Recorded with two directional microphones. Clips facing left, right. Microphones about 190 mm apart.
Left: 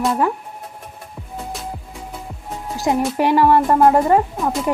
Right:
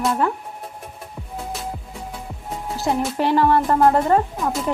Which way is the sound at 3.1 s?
10° left (ahead or behind).